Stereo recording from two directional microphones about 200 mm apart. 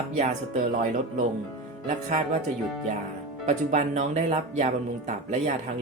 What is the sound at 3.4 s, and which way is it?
Speech, 35° right (ahead or behind).